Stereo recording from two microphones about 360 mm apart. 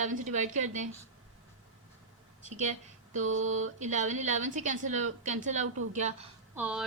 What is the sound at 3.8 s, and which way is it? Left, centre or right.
A woman's voice, centre.